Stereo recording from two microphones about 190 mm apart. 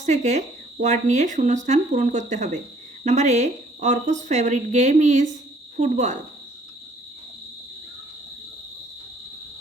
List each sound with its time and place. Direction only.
0.0 s speech: 40° right (ahead or behind)